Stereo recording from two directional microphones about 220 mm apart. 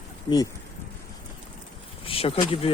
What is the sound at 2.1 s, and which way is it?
Speech, 25° left (ahead or behind).